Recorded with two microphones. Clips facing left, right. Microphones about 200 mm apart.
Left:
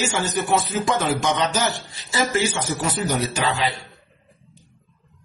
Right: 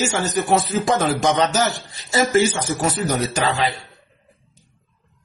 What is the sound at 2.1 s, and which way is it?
Speech, 45° right (ahead or behind).